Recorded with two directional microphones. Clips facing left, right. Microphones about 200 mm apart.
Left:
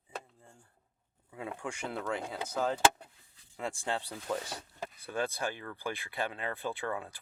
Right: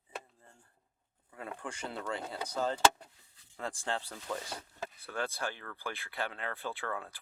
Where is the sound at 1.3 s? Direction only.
10° left (ahead or behind).